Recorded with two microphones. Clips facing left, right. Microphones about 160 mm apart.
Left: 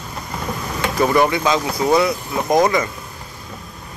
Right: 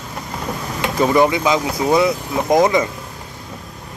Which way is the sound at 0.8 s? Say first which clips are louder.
Right 1 dB; 15° right (ahead or behind).